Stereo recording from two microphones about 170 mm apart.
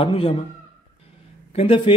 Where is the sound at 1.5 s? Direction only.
35° left (ahead or behind).